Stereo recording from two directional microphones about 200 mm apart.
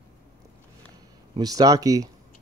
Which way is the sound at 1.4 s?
20° right (ahead or behind).